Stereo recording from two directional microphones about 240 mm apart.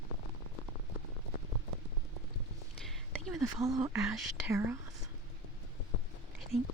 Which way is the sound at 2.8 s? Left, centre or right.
Centre.